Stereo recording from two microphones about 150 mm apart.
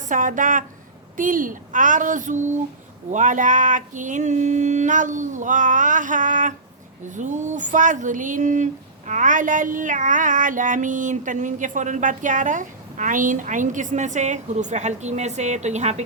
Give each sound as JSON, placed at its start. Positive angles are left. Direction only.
{"t": 0.1, "sound": "speech", "side_deg": -60}